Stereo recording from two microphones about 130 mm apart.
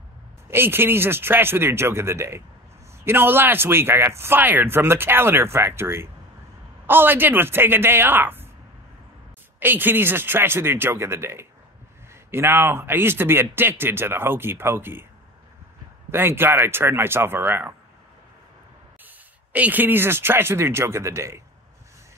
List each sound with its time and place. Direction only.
0.5 s speech: 15° right (ahead or behind)
9.6 s speech: 15° right (ahead or behind)
16.1 s speech: 15° right (ahead or behind)
19.0 s speech: 15° right (ahead or behind)